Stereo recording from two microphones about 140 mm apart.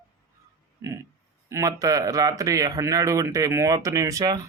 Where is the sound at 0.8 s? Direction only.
15° right (ahead or behind).